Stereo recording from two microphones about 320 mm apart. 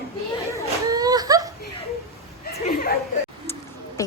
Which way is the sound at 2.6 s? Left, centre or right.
Left.